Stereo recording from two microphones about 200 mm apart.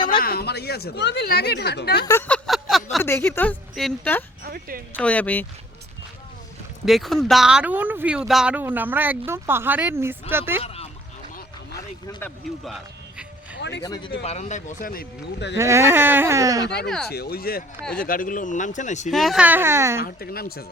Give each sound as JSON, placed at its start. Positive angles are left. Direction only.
{"t": 0.2, "sound": "speech", "side_deg": 50}
{"t": 2.0, "sound": "a sound", "side_deg": 15}
{"t": 3.0, "sound": "a woman's voice", "side_deg": 10}
{"t": 4.4, "sound": "a woman's voice", "side_deg": -45}
{"t": 4.9, "sound": "a woman's voice", "side_deg": 5}
{"t": 6.8, "sound": "speech", "side_deg": 0}
{"t": 12.2, "sound": "a sound", "side_deg": 0}
{"t": 13.6, "sound": "speech", "side_deg": 60}
{"t": 13.8, "sound": "speech", "side_deg": 20}
{"t": 14.3, "sound": "speech", "side_deg": 35}
{"t": 15.5, "sound": "speech", "side_deg": -15}
{"t": 16.6, "sound": "speech", "side_deg": 55}
{"t": 19.1, "sound": "speech", "side_deg": 0}
{"t": 20.1, "sound": "speech", "side_deg": 50}